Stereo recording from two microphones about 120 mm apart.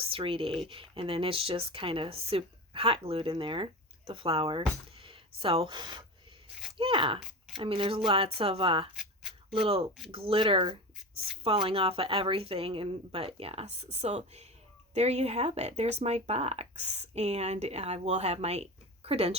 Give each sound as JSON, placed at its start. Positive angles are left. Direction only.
{"t": 0.0, "sound": "speech", "side_deg": -50}
{"t": 9.0, "sound": "a sound", "side_deg": 0}
{"t": 9.6, "sound": "speech", "side_deg": -50}